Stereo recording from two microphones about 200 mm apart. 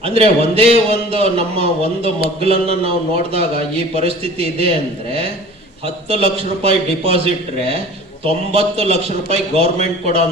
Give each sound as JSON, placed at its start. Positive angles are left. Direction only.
{"t": 0.0, "sound": "a man's voice", "side_deg": -30}
{"t": 6.1, "sound": "a man's voice", "side_deg": -30}
{"t": 8.2, "sound": "a man's voice", "side_deg": -30}